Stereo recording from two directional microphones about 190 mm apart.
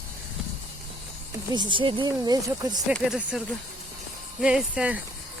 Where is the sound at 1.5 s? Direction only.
25° right (ahead or behind).